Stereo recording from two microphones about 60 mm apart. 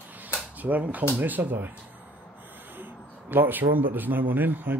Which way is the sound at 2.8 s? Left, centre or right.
Right.